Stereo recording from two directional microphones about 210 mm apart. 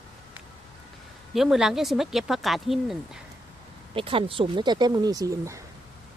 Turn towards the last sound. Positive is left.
turn(degrees=-15)  # may be behind; listen again after turning